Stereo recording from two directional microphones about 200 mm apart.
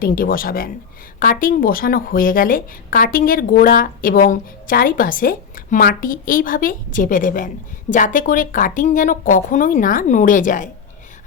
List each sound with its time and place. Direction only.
0.0 s speech: 45° left (ahead or behind)